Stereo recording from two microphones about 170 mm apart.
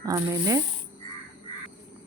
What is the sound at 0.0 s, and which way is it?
Speech, 20° right (ahead or behind).